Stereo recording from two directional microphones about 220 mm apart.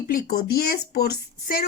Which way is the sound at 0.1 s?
45° left (ahead or behind).